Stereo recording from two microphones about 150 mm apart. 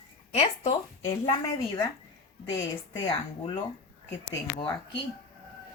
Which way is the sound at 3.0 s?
30° left (ahead or behind).